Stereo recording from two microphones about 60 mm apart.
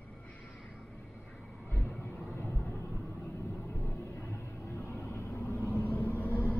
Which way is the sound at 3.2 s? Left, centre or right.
Left.